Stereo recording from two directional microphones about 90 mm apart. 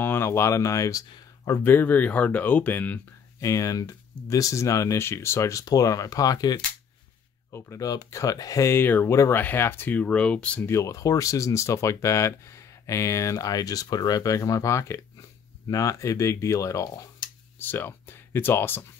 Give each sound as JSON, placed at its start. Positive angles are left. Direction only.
{"t": 0.0, "sound": "speech", "side_deg": 25}
{"t": 1.6, "sound": "speech", "side_deg": 20}
{"t": 3.3, "sound": "speech", "side_deg": 40}
{"t": 10.6, "sound": "speech", "side_deg": 30}
{"t": 17.6, "sound": "speech", "side_deg": 25}